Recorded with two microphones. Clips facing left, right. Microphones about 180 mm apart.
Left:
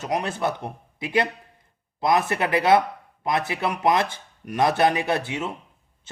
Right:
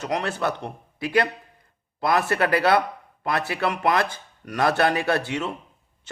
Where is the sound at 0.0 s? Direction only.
20° left (ahead or behind).